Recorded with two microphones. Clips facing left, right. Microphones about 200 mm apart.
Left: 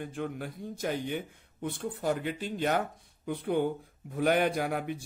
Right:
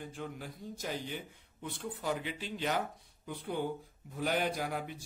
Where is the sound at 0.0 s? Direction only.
60° left (ahead or behind).